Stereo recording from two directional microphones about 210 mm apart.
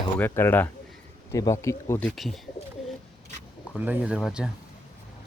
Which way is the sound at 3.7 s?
5° right (ahead or behind).